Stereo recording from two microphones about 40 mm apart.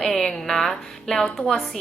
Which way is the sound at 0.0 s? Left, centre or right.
Centre.